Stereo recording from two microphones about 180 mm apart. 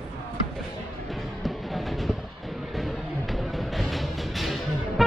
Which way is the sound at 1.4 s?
Centre (ahead or behind).